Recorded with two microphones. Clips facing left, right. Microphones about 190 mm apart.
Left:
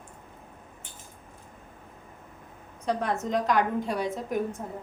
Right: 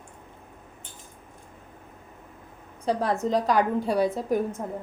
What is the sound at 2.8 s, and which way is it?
A woman's voice, 35° right (ahead or behind).